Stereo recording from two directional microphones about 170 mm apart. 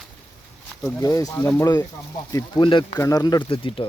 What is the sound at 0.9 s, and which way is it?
Speech, 20° left (ahead or behind).